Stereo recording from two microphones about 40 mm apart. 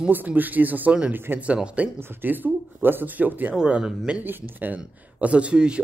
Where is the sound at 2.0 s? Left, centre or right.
Right.